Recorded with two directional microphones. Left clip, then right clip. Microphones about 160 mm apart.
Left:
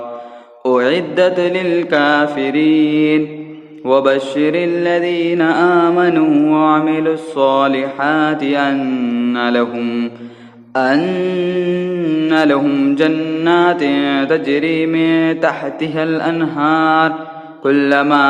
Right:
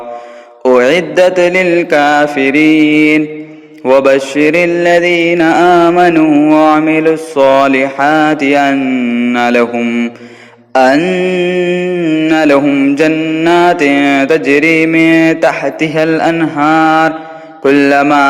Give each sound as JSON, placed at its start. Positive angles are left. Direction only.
{"t": 0.6, "sound": "mantra", "side_deg": -25}
{"t": 8.8, "sound": "mantra", "side_deg": -15}